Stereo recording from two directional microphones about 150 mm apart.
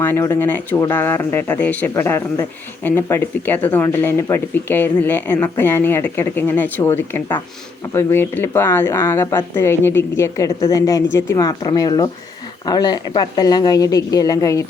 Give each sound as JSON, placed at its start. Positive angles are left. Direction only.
{"t": 0.0, "sound": "a woman's voice", "side_deg": 15}